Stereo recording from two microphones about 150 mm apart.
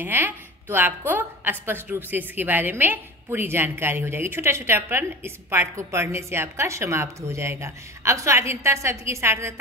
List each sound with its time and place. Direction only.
0.0 s a woman's voice: 15° right (ahead or behind)